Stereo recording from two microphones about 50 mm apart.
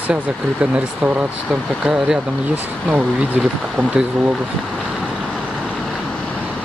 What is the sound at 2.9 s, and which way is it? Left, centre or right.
Speech, centre.